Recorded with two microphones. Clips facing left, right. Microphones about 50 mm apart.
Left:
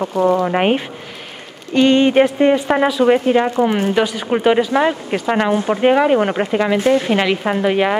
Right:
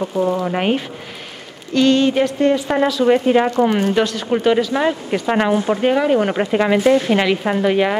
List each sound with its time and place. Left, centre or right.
0.2 s speech: left
0.5 s speech: left
3.3 s speech: centre
5.8 s speech: centre
6.5 s speech: centre
7.0 s speech: centre